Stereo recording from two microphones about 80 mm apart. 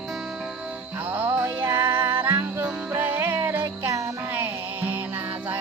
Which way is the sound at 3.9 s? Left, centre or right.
Right.